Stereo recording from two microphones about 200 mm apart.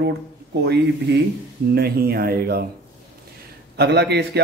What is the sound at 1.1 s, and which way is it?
A man's voice, 60° right (ahead or behind).